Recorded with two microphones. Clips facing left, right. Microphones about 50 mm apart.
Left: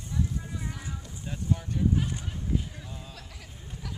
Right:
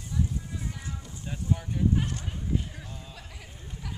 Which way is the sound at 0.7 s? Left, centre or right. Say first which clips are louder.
Even; centre.